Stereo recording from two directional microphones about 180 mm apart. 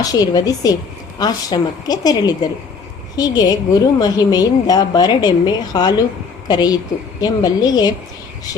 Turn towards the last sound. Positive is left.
turn(degrees=20)  # may be behind; listen again after turning